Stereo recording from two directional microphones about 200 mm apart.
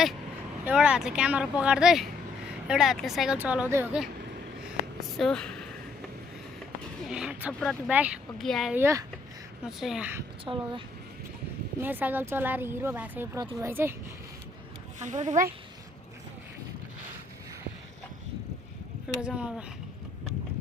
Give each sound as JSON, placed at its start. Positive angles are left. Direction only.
{"t": 0.6, "sound": "speech", "side_deg": -5}
{"t": 4.6, "sound": "a sound", "side_deg": 0}
{"t": 7.0, "sound": "speech", "side_deg": -5}
{"t": 8.8, "sound": "speech", "side_deg": -15}
{"t": 9.6, "sound": "speech", "side_deg": 0}
{"t": 10.4, "sound": "speech", "side_deg": -25}
{"t": 11.8, "sound": "speech", "side_deg": -10}
{"t": 15.0, "sound": "speech", "side_deg": -35}
{"t": 19.2, "sound": "speech", "side_deg": -5}